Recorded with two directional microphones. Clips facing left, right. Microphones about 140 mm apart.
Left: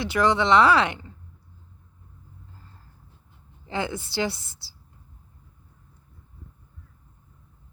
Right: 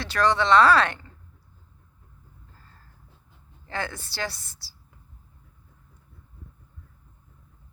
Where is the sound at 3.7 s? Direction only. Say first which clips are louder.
Left 4 dB; 20° left (ahead or behind).